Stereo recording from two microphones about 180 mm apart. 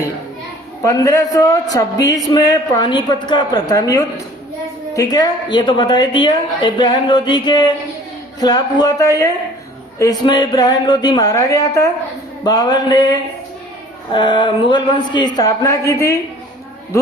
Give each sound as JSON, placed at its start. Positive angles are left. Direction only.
{"t": 0.8, "sound": "a woman's voice", "side_deg": 20}